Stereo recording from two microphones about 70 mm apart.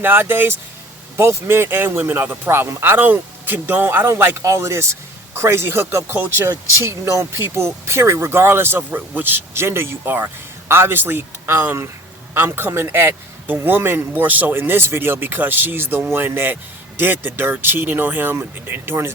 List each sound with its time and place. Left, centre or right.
0.0 s speech: right
4.4 s speech: right